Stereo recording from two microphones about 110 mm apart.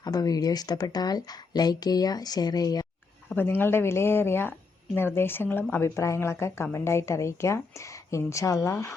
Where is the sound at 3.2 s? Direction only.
20° left (ahead or behind).